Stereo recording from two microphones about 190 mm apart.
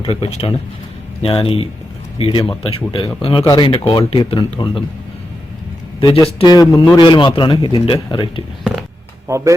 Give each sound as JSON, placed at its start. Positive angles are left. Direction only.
{"t": 0.0, "sound": "speech", "side_deg": 30}
{"t": 6.0, "sound": "a man's voice", "side_deg": 20}
{"t": 9.2, "sound": "speech", "side_deg": -15}